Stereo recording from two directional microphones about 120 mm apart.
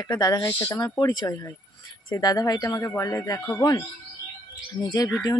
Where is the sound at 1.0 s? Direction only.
35° left (ahead or behind); by 4.9 s 20° left (ahead or behind).